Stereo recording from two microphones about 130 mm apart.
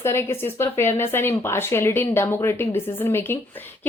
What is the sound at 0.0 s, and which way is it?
Speech, 20° left (ahead or behind).